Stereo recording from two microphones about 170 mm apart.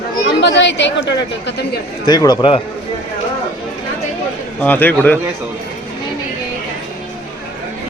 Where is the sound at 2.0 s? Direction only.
25° left (ahead or behind).